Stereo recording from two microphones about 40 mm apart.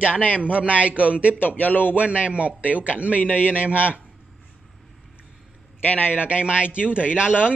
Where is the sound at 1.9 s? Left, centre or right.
Right.